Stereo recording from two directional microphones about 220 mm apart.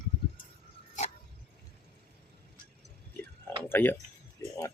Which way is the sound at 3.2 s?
10° left (ahead or behind).